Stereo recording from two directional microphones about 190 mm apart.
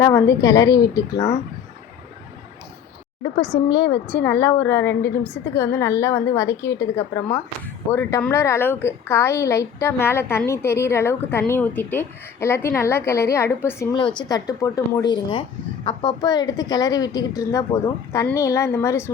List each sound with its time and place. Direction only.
0.0 s a woman's voice: 15° left (ahead or behind)
3.5 s a woman's voice: 20° left (ahead or behind)
4.0 s a woman's voice: 10° left (ahead or behind)